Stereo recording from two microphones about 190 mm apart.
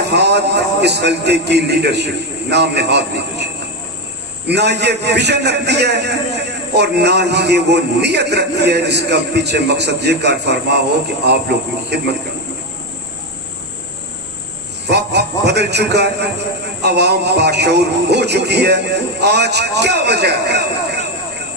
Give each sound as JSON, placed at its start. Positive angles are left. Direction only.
{"t": 0.1, "sound": "a man's voice", "side_deg": -60}
{"t": 14.8, "sound": "a sound", "side_deg": -60}
{"t": 16.8, "sound": "a man's voice", "side_deg": -60}